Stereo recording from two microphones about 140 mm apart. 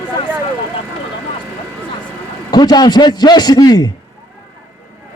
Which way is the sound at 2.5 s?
30° left (ahead or behind).